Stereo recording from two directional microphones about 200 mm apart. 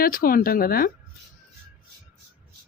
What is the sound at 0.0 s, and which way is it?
Speech, 45° left (ahead or behind).